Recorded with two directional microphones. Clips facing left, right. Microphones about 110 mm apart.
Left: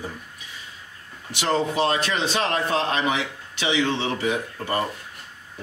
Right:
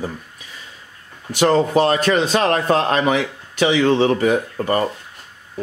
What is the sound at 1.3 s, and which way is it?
A man's voice, 45° right (ahead or behind).